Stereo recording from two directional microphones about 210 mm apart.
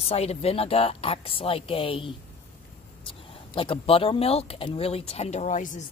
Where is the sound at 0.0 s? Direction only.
30° left (ahead or behind).